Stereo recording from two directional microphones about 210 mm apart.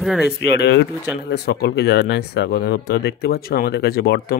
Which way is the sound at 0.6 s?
55° left (ahead or behind).